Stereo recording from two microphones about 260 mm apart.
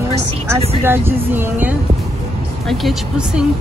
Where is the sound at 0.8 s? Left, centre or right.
Centre.